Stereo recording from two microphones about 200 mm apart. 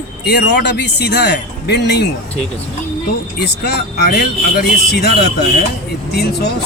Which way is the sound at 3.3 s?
55° left (ahead or behind).